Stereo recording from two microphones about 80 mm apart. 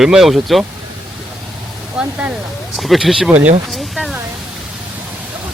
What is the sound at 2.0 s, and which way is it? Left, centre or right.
Speech, centre.